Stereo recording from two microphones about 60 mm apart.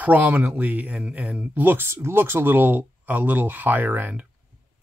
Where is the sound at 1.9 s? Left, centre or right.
Right.